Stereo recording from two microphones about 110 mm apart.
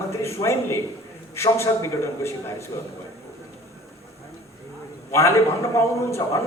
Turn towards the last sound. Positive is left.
turn(degrees=25)  # may be behind; listen again after turning